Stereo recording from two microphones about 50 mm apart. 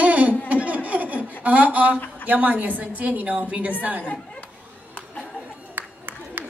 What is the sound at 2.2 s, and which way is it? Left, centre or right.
A woman's voice, right.